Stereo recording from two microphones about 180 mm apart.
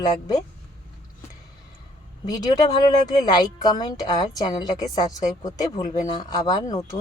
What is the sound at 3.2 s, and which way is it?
Speech, 20° left (ahead or behind).